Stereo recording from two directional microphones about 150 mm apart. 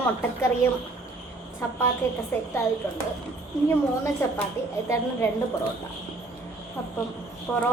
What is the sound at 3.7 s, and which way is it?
Speech, 20° left (ahead or behind).